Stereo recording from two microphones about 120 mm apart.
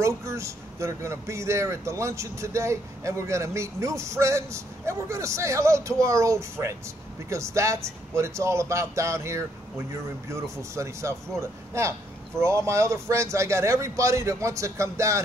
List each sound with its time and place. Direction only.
0.0 s speech: 25° right (ahead or behind)
10.7 s speech: 25° right (ahead or behind)